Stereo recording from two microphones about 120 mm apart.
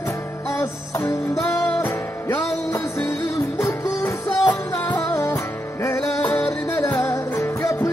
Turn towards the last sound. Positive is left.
turn(degrees=25)  # may be behind; listen again after turning